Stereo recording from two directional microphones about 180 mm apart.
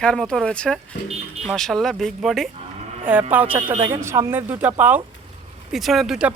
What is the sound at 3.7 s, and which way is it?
Speech, 30° right (ahead or behind).